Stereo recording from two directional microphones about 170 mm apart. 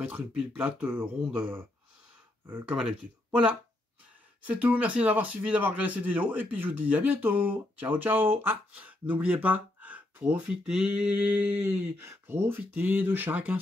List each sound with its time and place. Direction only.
0.0 s a man's voice: 10° right (ahead or behind)
4.4 s a man's voice: 10° right (ahead or behind)